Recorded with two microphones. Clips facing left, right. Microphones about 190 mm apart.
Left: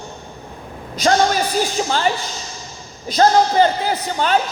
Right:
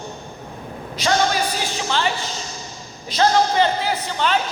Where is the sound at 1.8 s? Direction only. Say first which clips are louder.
Left 3 dB; 40° left (ahead or behind).